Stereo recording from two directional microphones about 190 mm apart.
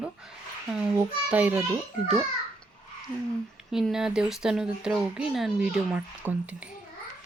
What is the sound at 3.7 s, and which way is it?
Speech, centre (ahead or behind).